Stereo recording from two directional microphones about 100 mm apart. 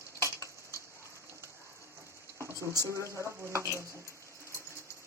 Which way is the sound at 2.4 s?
30° right (ahead or behind).